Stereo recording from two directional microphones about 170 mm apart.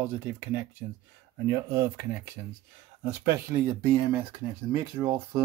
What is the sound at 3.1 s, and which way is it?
Speech, 15° right (ahead or behind).